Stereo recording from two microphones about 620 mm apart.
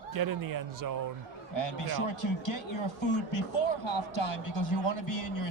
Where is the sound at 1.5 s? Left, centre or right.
Left.